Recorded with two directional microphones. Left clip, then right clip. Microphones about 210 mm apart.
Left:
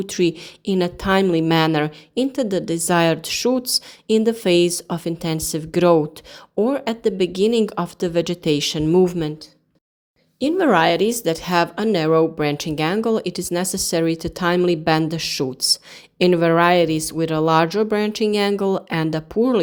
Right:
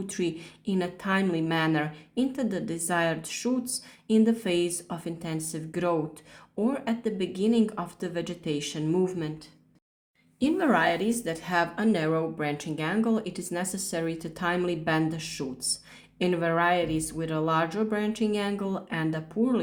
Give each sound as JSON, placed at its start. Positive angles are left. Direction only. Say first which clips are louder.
{"t": 0.0, "sound": "a woman's voice", "louder": "left 11 dB", "side_deg": 40}
{"t": 10.4, "sound": "a woman's voice", "louder": "left 8 dB", "side_deg": 35}